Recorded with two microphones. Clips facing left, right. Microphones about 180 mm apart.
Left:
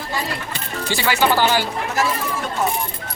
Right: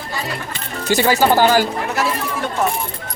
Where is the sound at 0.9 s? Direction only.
40° right (ahead or behind).